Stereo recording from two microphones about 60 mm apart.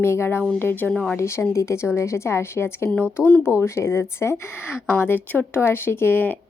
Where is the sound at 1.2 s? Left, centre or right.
Left.